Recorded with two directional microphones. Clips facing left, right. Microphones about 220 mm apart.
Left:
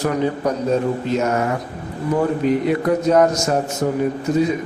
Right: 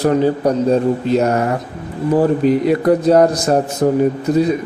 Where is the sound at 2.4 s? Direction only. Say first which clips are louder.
Right 4 dB; 35° right (ahead or behind).